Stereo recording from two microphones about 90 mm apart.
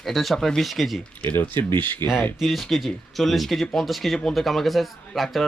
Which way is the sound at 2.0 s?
25° left (ahead or behind).